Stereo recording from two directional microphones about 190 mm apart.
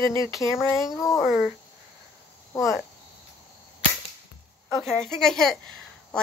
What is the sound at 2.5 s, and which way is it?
Speech, 15° left (ahead or behind).